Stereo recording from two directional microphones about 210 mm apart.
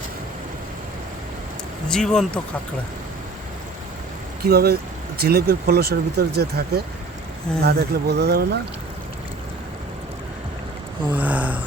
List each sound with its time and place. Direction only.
1.9 s speech: 5° left (ahead or behind)
4.4 s speech: 45° right (ahead or behind)
11.1 s gasp: 5° right (ahead or behind)